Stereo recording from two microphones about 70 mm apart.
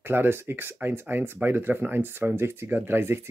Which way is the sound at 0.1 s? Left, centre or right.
Right.